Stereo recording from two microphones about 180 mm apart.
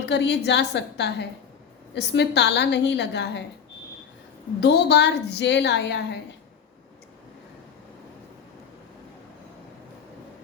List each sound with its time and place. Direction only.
0.0 s a woman's voice: 70° left (ahead or behind)
4.6 s a woman's voice: 70° left (ahead or behind)